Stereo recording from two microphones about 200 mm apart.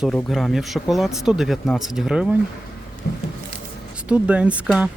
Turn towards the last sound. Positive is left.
turn(degrees=-5)  # may be behind; listen again after turning